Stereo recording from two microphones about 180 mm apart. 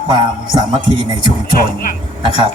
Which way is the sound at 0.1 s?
25° right (ahead or behind).